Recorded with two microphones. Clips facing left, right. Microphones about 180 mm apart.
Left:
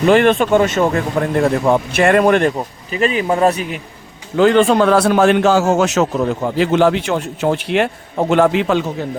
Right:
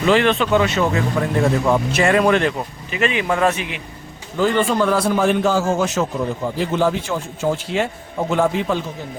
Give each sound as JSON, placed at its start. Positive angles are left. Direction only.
{"t": 0.0, "sound": "a man's voice", "side_deg": 50}
{"t": 4.4, "sound": "a man's voice", "side_deg": 75}